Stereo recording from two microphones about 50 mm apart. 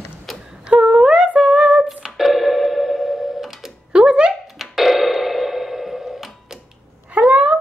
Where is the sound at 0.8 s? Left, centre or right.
Centre.